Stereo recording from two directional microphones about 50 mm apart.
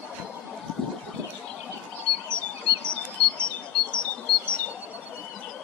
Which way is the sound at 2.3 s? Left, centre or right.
Left.